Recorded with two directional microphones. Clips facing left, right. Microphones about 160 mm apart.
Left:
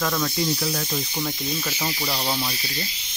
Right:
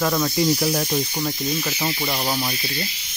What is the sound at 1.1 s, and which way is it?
Speech, 10° right (ahead or behind).